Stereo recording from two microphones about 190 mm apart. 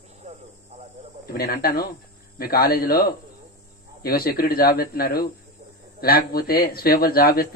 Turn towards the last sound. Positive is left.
turn(degrees=50)  # may be behind; listen again after turning